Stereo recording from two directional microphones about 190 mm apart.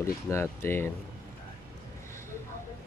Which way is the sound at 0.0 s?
15° left (ahead or behind).